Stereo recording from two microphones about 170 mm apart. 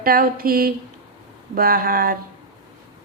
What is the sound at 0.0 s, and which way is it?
A woman's voice, 60° right (ahead or behind).